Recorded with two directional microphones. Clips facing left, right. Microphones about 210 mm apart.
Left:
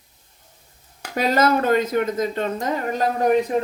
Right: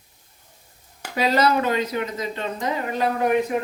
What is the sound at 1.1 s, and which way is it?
Speech, 50° left (ahead or behind).